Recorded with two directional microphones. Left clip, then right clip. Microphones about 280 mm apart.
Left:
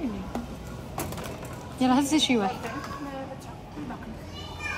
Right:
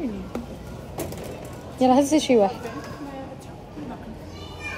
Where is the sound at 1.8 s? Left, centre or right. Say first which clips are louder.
Right 5 dB; centre.